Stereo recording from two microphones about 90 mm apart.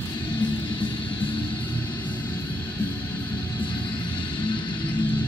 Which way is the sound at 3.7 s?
55° left (ahead or behind).